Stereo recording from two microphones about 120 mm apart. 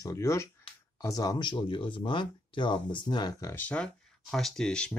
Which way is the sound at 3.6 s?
10° left (ahead or behind).